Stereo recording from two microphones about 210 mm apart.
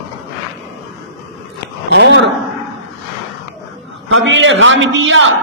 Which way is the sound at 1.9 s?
55° right (ahead or behind).